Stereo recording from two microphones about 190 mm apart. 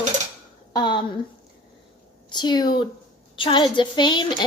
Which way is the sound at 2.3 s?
20° left (ahead or behind).